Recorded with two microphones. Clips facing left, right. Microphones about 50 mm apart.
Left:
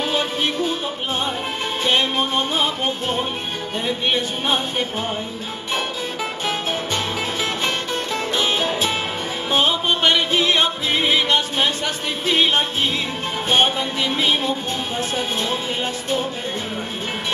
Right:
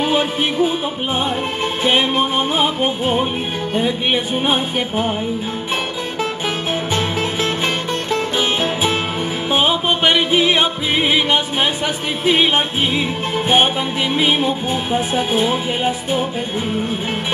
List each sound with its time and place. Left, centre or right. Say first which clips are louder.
0.0 s music: right 4 dB; centre
1.9 s music: right 3 dB; centre
8.1 s music: right 3 dB; centre